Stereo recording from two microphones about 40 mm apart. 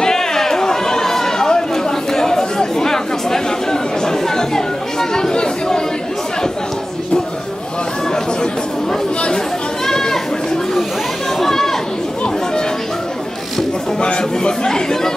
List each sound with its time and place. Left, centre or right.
0.0 s chatter: centre
9.8 s sheep: centre
11.3 s chatter: centre
14.0 s chatter: left